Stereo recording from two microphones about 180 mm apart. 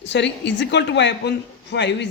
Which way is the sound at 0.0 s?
75° left (ahead or behind).